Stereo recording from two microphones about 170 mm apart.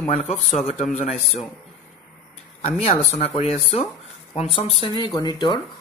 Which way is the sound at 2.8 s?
40° left (ahead or behind).